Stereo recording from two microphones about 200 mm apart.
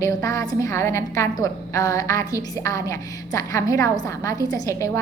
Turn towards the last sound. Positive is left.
turn(degrees=15)  # may be behind; listen again after turning